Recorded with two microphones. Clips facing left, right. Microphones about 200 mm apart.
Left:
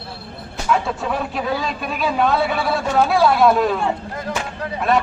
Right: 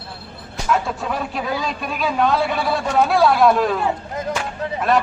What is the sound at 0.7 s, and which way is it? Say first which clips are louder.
A man's voice: left 1 dB; centre (ahead or behind).